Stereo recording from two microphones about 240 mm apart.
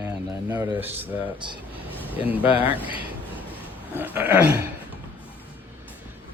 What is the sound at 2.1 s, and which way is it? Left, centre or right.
Speech, centre.